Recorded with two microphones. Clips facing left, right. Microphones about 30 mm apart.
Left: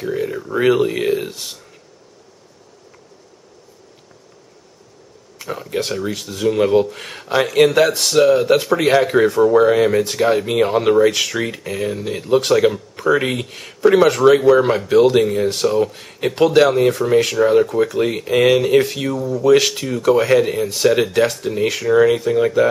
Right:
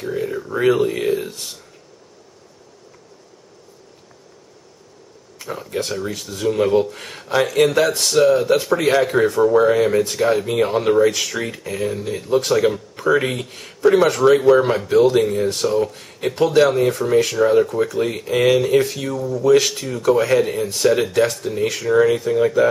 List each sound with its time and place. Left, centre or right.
0.0 s speech: centre
5.4 s speech: centre
12.7 s speech: centre
14.4 s speech: centre
14.9 s speech: centre